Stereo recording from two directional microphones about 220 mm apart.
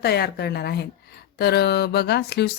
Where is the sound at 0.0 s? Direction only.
45° left (ahead or behind).